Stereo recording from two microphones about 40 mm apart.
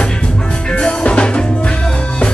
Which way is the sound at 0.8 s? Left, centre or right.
Left.